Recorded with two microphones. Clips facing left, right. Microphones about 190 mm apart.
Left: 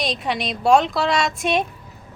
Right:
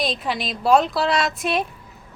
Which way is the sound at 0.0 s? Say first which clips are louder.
Left 1 dB; centre (ahead or behind).